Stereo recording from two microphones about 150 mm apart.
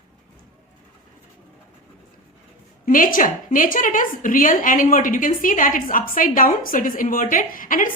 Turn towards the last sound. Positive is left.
turn(degrees=65)  # may be behind; listen again after turning